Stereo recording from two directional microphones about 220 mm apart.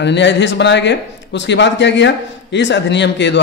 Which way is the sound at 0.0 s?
50° left (ahead or behind).